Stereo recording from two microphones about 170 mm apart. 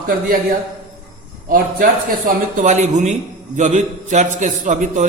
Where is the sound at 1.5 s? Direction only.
55° right (ahead or behind).